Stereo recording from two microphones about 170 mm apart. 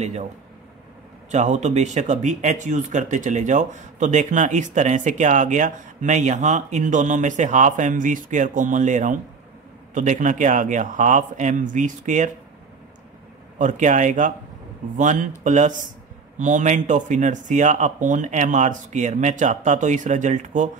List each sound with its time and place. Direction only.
0.0 s speech: 40° right (ahead or behind)
1.3 s speech: 45° right (ahead or behind)
13.6 s speech: 45° right (ahead or behind)